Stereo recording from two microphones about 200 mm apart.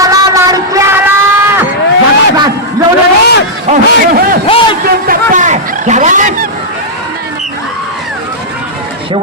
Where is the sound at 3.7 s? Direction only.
45° right (ahead or behind).